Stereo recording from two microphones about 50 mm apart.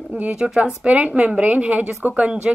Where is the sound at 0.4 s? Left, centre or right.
Centre.